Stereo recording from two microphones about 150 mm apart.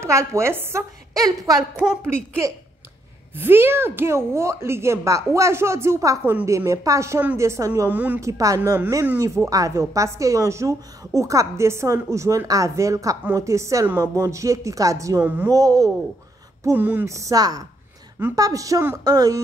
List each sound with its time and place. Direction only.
0.0 s a woman's voice: 20° right (ahead or behind)
1.6 s a woman's voice: 5° right (ahead or behind)
2.4 s a woman's voice: 20° right (ahead or behind)
16.6 s a woman's voice: 10° right (ahead or behind)